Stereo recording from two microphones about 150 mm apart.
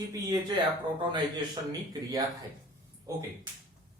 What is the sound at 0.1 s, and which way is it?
Speech, 25° right (ahead or behind).